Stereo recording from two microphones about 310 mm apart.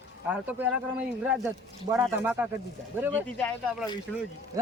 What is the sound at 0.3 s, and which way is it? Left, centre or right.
A man's voice, centre.